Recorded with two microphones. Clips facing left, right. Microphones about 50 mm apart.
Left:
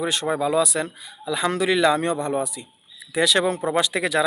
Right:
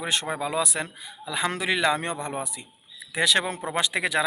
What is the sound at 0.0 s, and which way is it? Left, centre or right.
Speech, right.